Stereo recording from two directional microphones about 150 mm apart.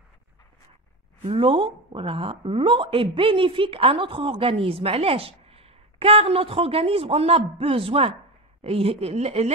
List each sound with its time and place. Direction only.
1.3 s a woman's voice: 35° right (ahead or behind)